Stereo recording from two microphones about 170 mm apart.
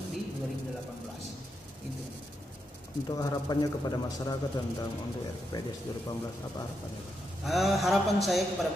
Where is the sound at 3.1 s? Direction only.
20° left (ahead or behind).